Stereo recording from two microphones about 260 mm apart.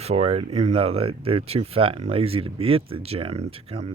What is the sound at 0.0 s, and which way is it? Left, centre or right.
Speech, right.